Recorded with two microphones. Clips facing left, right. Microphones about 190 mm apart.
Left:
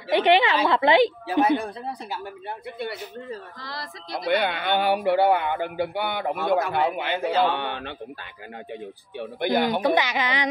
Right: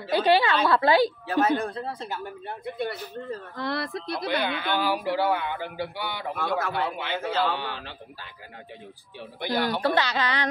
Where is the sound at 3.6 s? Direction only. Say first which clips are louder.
Right 8 dB; 60° right (ahead or behind).